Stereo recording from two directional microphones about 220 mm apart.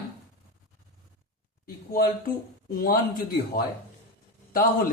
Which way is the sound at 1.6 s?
40° left (ahead or behind).